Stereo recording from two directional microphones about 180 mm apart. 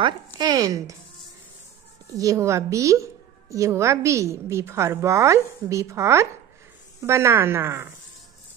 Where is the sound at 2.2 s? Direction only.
15° right (ahead or behind).